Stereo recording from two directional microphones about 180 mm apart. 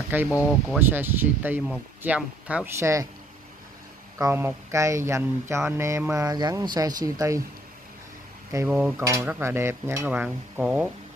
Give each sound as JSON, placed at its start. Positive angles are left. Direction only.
{"t": 0.3, "sound": "speech", "side_deg": 15}
{"t": 0.7, "sound": "speech", "side_deg": -10}
{"t": 4.2, "sound": "speech", "side_deg": -15}
{"t": 8.5, "sound": "speech", "side_deg": -10}